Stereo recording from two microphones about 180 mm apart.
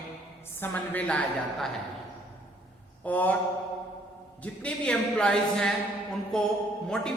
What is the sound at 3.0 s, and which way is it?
Speech, 10° left (ahead or behind).